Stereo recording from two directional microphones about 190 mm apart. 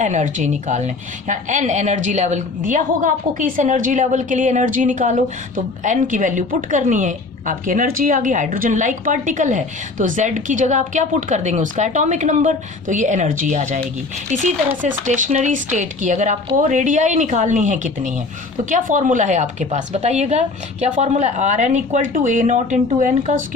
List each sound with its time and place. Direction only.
0.0 s a woman's voice: 40° right (ahead or behind)